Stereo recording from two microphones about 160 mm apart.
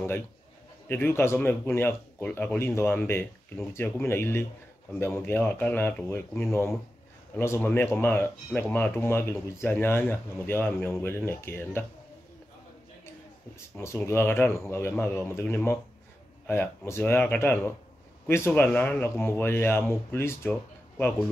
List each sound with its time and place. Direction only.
0.8 s speech: 15° left (ahead or behind)
13.7 s speech: 15° left (ahead or behind)